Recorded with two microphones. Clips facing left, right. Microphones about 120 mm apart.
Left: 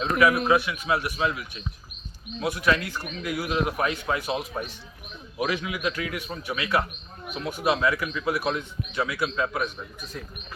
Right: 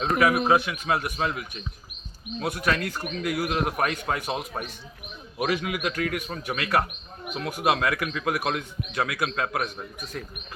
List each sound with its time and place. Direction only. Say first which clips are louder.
0.0 s a man's voice: even; 45° right (ahead or behind)
5.4 s a man's voice: right 1 dB; 50° right (ahead or behind)